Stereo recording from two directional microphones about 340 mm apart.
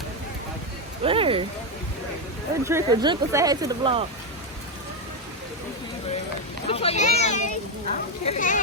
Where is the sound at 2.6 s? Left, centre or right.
Centre.